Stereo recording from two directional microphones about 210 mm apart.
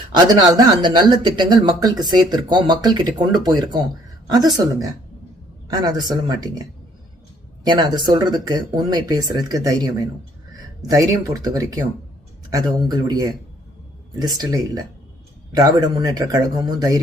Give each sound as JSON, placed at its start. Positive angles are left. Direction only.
{"t": 0.3, "sound": "speech", "side_deg": -20}
{"t": 7.6, "sound": "speech", "side_deg": -20}